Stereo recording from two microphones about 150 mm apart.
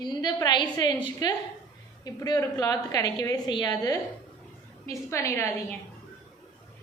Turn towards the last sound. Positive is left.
turn(degrees=20)  # may be behind; listen again after turning